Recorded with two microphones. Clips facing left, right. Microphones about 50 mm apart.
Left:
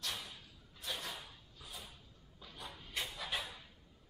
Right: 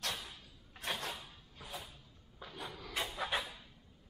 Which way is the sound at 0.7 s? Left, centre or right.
Right.